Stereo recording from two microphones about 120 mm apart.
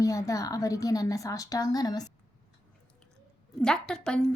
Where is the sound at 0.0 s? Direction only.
25° left (ahead or behind).